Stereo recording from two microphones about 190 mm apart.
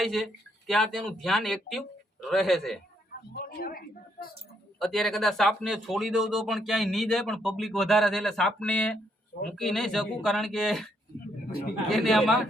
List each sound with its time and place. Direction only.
0.0 s a man's voice: centre (ahead or behind)
3.1 s a woman's voice: 50° left (ahead or behind)
4.8 s a man's voice: centre (ahead or behind)
11.9 s a man's voice: centre (ahead or behind)